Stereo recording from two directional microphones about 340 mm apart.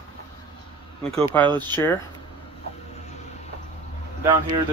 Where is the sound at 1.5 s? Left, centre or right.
Centre.